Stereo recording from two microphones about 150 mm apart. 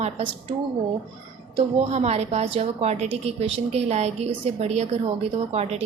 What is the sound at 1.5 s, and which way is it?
A woman's voice, 45° right (ahead or behind).